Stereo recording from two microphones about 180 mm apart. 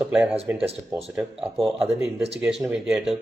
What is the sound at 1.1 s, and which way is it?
Speech, 5° right (ahead or behind).